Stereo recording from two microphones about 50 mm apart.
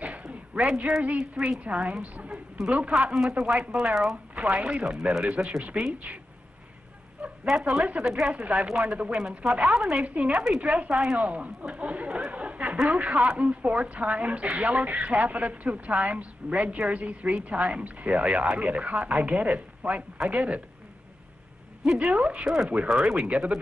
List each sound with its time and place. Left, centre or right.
0.0 s a sound: right
1.3 s speech: centre
1.6 s a woman's voice: right
5.6 s a woman's voice: right
7.4 s speech: centre
8.3 s a woman's voice: right
10.0 s a woman's voice: right
10.3 s speech: centre
10.6 s a woman's voice: right
10.9 s speech: centre
11.1 s a sound: right
12.8 s a woman's voice: right
21.9 s a woman's voice: right
22.8 s a woman's voice: centre